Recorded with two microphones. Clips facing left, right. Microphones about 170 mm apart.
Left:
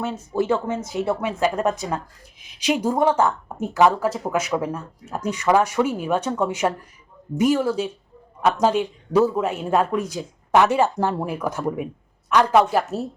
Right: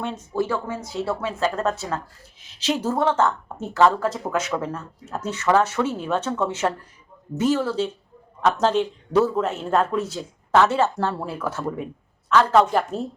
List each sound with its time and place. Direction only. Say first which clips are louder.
0.0 s speech: left 2 dB; 5° left (ahead or behind)
0.3 s speech: left 4 dB; 20° left (ahead or behind)